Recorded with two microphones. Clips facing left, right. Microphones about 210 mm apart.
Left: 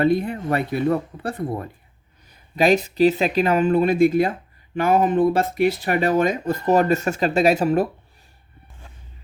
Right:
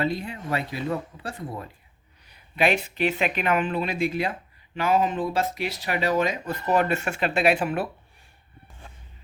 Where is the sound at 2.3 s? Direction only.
40° left (ahead or behind).